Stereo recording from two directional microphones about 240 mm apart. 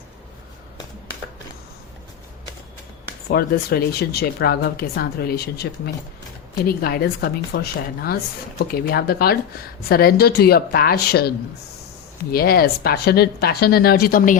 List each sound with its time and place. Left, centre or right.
3.2 s a woman's voice: left